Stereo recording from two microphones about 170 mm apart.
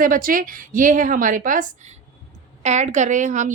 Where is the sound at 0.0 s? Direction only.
55° right (ahead or behind).